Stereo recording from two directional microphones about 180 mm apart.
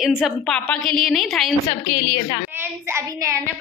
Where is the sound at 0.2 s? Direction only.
5° left (ahead or behind).